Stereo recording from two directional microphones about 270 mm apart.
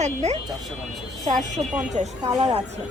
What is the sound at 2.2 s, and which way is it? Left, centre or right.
Speech, centre.